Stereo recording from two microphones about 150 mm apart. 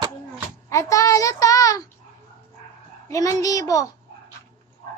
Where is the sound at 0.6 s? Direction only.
20° left (ahead or behind).